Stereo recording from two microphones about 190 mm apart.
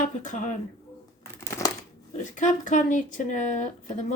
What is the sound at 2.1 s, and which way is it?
Speech, 40° left (ahead or behind).